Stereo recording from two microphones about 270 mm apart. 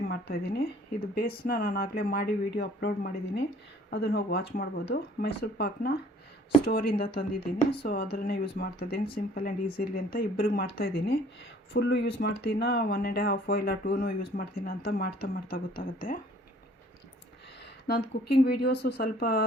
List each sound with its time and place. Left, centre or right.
0.1 s speech: left
17.8 s speech: left